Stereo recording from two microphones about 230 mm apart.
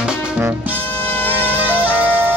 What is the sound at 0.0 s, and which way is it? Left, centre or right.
Music, centre.